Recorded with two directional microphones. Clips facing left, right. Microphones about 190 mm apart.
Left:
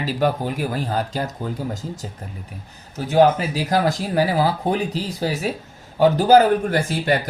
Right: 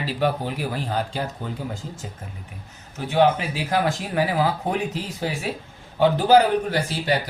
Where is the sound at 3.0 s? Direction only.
40° left (ahead or behind).